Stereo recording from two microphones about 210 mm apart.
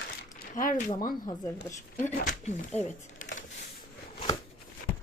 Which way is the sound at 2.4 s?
30° left (ahead or behind).